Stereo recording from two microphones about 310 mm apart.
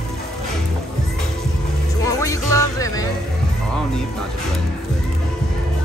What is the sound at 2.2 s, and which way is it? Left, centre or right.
Music, centre.